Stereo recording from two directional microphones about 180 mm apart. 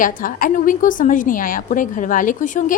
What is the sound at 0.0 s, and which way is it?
A woman's voice, 50° left (ahead or behind).